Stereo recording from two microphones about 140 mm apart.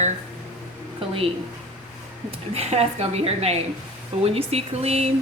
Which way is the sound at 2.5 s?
50° right (ahead or behind).